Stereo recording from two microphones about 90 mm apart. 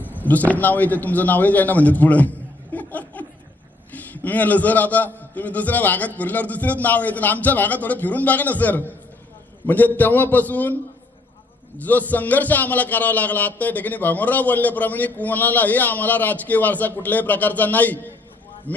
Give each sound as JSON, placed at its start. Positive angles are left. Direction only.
{"t": 0.0, "sound": "a man's voice", "side_deg": 20}
{"t": 11.8, "sound": "a man's voice", "side_deg": 20}